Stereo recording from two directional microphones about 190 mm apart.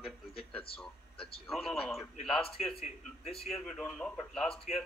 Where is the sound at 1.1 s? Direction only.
30° left (ahead or behind).